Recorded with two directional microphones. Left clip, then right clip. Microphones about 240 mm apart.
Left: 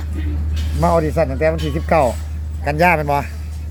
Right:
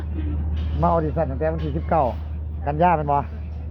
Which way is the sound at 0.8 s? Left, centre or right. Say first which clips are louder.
Left 5 dB; left.